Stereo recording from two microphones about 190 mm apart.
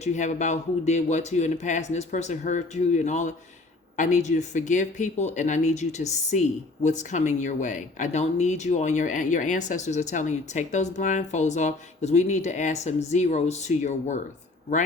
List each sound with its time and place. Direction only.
0.0 s speech: 40° left (ahead or behind)